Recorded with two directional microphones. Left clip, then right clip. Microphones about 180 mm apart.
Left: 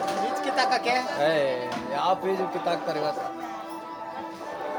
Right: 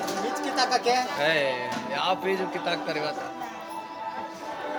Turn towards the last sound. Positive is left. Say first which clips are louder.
# left 2 dB
turn(degrees=25)  # may be behind; listen again after turning